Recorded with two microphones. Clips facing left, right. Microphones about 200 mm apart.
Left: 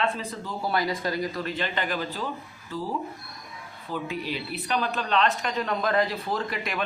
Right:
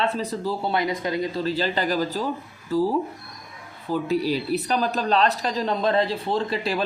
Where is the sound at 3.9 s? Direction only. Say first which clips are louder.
Right 8 dB; 40° right (ahead or behind).